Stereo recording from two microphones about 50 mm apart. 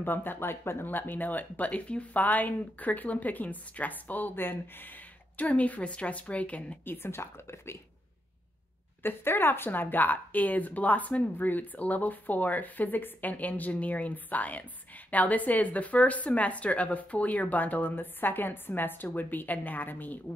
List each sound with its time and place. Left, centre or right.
0.0 s speech: left
0.8 s a woman's voice: left
1.7 s a woman's voice: left
5.4 s a woman's voice: left
6.8 s speech: left
9.0 s a woman's voice: left